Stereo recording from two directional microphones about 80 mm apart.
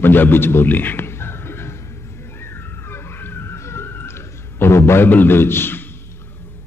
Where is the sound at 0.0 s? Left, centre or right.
Left.